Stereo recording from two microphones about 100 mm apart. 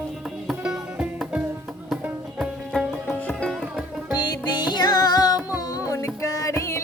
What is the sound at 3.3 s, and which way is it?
Sitar, 10° left (ahead or behind).